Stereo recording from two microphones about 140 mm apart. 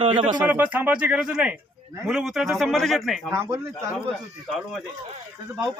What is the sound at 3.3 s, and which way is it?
Speech, 20° right (ahead or behind).